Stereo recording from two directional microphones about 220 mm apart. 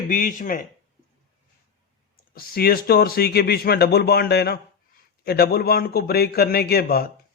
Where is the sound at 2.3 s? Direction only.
45° left (ahead or behind).